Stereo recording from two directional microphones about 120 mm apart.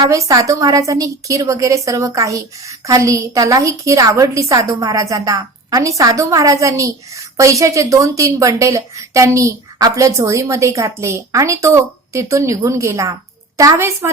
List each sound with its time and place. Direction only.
0.0 s a woman's voice: 25° right (ahead or behind)